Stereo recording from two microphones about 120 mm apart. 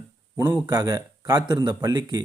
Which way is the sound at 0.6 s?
35° right (ahead or behind).